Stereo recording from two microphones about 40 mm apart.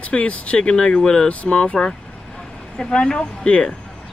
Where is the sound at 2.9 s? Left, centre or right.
Left.